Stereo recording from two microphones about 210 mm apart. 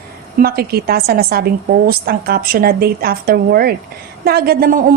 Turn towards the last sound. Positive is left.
turn(degrees=-45)  # may be behind; listen again after turning